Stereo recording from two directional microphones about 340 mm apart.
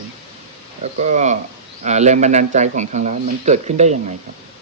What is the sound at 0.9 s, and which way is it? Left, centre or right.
Speech, right.